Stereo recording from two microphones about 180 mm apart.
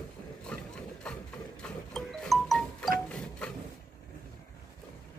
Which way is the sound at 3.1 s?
5° left (ahead or behind).